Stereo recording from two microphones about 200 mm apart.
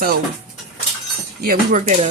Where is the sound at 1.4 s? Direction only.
45° right (ahead or behind).